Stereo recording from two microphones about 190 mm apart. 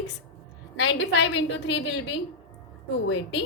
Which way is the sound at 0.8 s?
65° left (ahead or behind).